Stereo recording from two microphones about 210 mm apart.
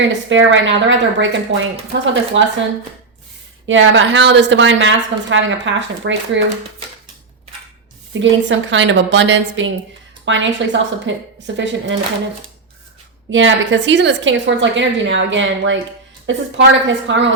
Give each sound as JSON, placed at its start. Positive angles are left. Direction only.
{"t": 0.0, "sound": "a woman's voice", "side_deg": -60}
{"t": 3.7, "sound": "a woman's voice", "side_deg": -65}
{"t": 8.2, "sound": "a woman's voice", "side_deg": -60}
{"t": 13.3, "sound": "a woman's voice", "side_deg": -60}